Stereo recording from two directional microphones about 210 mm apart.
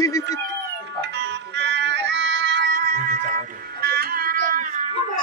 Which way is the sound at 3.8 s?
45° right (ahead or behind).